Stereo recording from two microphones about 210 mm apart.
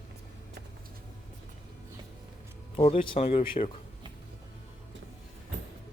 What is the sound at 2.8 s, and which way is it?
Speech, 30° left (ahead or behind).